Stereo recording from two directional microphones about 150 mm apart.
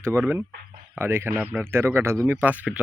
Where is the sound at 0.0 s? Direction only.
15° right (ahead or behind).